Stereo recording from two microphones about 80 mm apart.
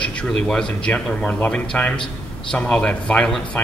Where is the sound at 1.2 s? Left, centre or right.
Left.